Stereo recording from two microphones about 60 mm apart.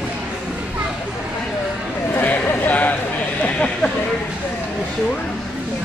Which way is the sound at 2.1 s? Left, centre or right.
Left.